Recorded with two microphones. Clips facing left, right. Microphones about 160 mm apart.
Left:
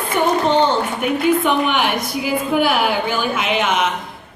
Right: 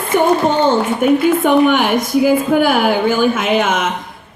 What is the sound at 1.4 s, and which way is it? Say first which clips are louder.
A woman's voice: right 6 dB; 45° right (ahead or behind).